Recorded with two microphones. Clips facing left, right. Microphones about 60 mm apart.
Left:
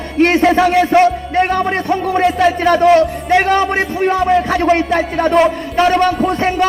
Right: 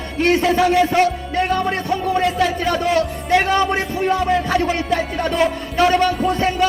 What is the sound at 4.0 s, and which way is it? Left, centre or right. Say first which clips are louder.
Music: left 5 dB; left.